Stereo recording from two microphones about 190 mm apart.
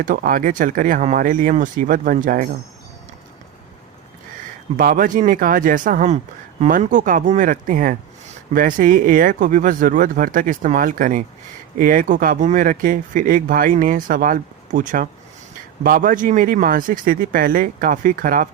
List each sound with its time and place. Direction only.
0.0 s speech: 45° right (ahead or behind)
4.8 s speech: 45° right (ahead or behind)